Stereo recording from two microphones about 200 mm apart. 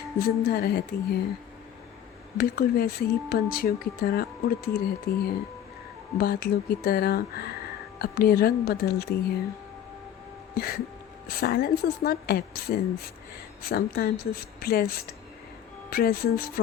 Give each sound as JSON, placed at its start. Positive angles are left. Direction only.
{"t": 0.2, "sound": "speech", "side_deg": 50}
{"t": 2.4, "sound": "speech", "side_deg": 50}
{"t": 10.5, "sound": "music", "side_deg": 50}
{"t": 11.3, "sound": "speech", "side_deg": 50}